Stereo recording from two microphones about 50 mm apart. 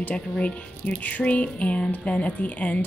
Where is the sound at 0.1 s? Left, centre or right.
Left.